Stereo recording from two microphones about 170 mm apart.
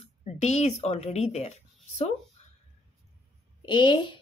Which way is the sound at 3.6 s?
25° left (ahead or behind).